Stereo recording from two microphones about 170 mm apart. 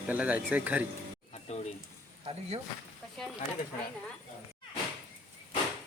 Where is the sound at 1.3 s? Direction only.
40° left (ahead or behind).